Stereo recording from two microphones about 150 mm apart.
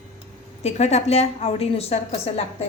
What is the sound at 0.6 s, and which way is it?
A woman's voice, 45° left (ahead or behind).